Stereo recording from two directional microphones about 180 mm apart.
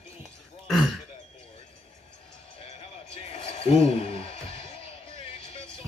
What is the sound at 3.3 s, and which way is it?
Basketball bounce, 35° left (ahead or behind).